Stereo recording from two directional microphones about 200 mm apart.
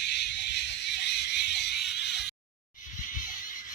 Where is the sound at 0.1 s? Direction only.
55° left (ahead or behind).